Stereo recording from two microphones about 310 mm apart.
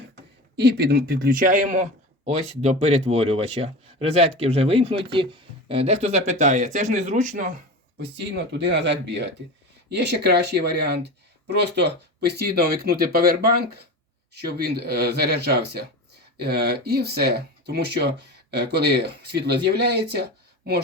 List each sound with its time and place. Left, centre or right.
0.5 s speech: right